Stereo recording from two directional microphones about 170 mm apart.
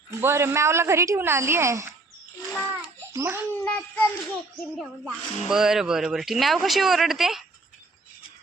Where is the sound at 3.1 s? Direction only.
15° right (ahead or behind).